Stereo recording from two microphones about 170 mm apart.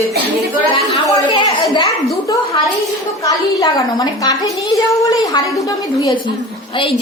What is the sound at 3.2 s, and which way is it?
A woman's voice, 20° left (ahead or behind).